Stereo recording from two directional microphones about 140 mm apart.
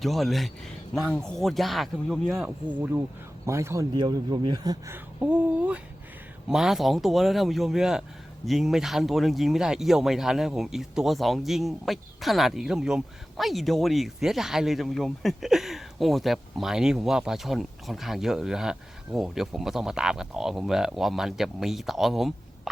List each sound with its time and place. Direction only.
0.0 s speech: centre (ahead or behind)
3.4 s speech: 20° right (ahead or behind)
3.9 s speech: 35° right (ahead or behind)
5.2 s speech: 10° right (ahead or behind)